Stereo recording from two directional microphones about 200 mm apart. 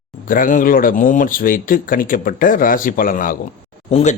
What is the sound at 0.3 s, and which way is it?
A man's voice, 40° left (ahead or behind).